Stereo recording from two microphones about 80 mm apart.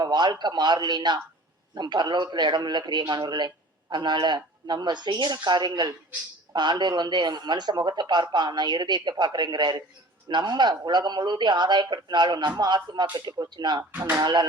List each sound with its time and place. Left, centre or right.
0.0 s a man's voice: right